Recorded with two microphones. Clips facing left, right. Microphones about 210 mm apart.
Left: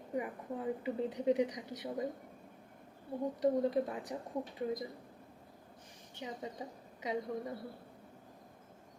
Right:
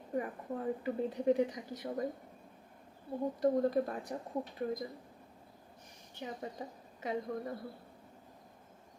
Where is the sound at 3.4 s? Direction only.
15° left (ahead or behind).